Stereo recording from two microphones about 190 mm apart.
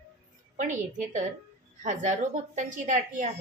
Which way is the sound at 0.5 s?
40° right (ahead or behind).